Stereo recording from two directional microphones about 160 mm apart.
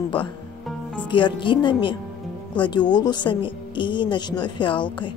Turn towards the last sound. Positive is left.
turn(degrees=30)  # may be behind; listen again after turning